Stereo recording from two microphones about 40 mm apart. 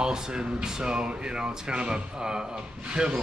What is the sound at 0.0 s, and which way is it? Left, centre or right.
Speech, centre.